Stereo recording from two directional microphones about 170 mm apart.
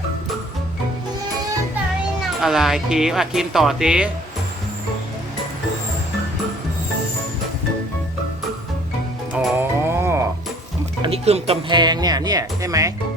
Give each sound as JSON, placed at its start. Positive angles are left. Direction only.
{"t": 2.4, "sound": "speech", "side_deg": 0}
{"t": 9.3, "sound": "music", "side_deg": 0}
{"t": 9.6, "sound": "music", "side_deg": -15}
{"t": 11.0, "sound": "speech", "side_deg": -35}